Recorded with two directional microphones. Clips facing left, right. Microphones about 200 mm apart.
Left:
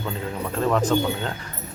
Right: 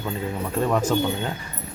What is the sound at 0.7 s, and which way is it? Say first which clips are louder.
Speech: left 2 dB; 10° right (ahead or behind).